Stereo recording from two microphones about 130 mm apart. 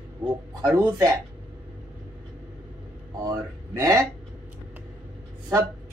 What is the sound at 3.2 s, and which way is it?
Speech, 25° right (ahead or behind).